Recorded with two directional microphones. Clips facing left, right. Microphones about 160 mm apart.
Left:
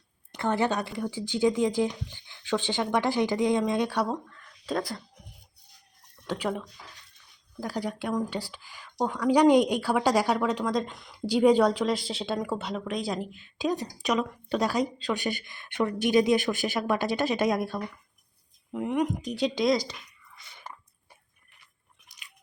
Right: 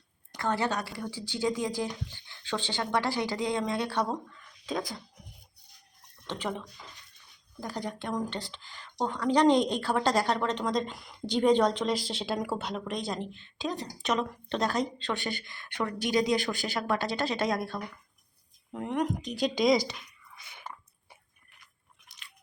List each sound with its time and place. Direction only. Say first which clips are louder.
0.3 s speech: left 3 dB; 15° left (ahead or behind)
4.1 s a sound: left 2 dB; 5° right (ahead or behind)
4.8 s speech: left 3 dB; 5° left (ahead or behind)
6.2 s speech: left 4 dB; 10° left (ahead or behind)
7.6 s speech: left 4 dB; 10° left (ahead or behind)
18.7 s speech: left 3 dB; 5° left (ahead or behind)